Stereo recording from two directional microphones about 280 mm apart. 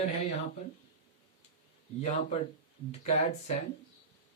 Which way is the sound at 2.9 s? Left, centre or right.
Left.